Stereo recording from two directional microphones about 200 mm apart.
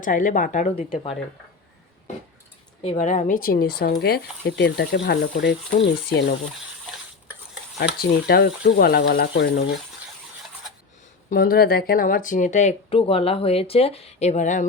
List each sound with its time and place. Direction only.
0.0 s speech: 40° left (ahead or behind)
2.8 s a woman's voice: 35° left (ahead or behind); by 6.3 s 60° left (ahead or behind)
7.9 s speech: 50° left (ahead or behind)
11.3 s speech: 50° left (ahead or behind)